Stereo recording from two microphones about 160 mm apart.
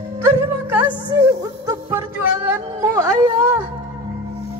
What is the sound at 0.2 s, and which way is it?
Music, 15° right (ahead or behind).